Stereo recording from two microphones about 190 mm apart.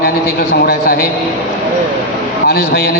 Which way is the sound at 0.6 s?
50° left (ahead or behind).